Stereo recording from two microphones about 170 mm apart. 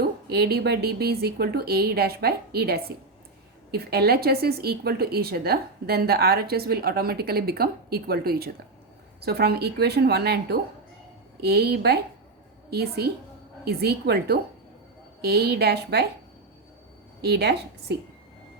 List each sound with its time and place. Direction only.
0.3 s speech: 70° right (ahead or behind)
17.2 s speech: 75° right (ahead or behind)